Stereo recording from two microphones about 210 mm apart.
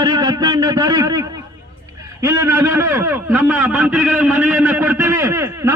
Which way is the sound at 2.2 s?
15° right (ahead or behind).